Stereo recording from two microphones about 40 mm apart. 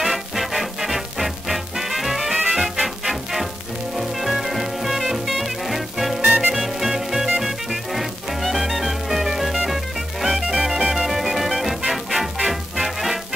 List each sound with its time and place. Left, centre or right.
0.0 s music: centre
6.2 s music: right
6.5 s music: centre